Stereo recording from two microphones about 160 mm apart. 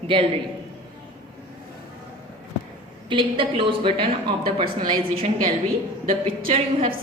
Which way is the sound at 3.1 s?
30° right (ahead or behind).